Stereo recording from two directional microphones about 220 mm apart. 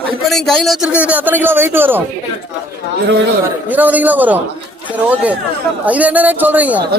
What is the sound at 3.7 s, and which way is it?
Speech, 5° right (ahead or behind).